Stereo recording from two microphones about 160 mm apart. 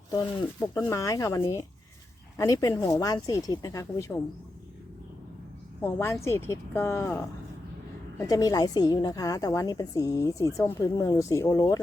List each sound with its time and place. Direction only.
0.1 s a woman's voice: 25° left (ahead or behind)
5.8 s speech: 15° left (ahead or behind)
8.2 s a woman's voice: 20° left (ahead or behind)